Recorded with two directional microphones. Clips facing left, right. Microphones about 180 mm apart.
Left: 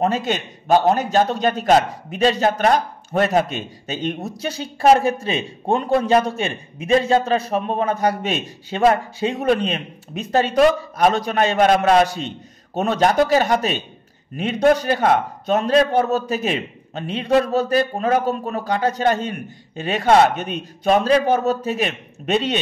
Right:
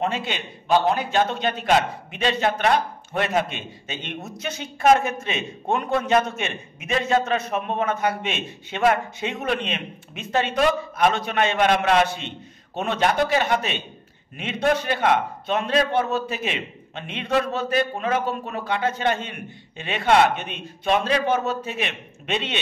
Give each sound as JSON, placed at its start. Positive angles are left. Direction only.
{"t": 0.0, "sound": "a man's voice", "side_deg": 40}